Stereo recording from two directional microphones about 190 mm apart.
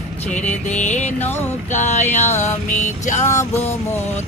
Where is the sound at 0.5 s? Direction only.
5° left (ahead or behind).